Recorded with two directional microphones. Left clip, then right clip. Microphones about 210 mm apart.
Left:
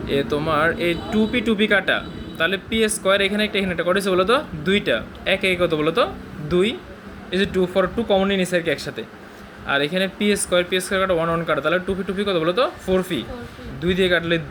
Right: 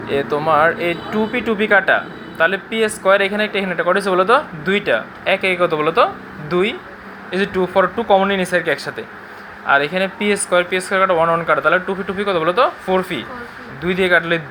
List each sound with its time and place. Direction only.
0.1 s speech: 30° left (ahead or behind)